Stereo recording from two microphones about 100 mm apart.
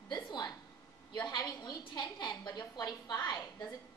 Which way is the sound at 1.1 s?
45° left (ahead or behind).